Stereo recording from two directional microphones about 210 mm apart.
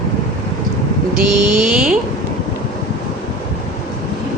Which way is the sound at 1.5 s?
5° right (ahead or behind).